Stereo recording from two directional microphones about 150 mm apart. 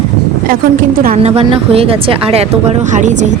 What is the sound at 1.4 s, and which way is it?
A woman's voice, 40° right (ahead or behind).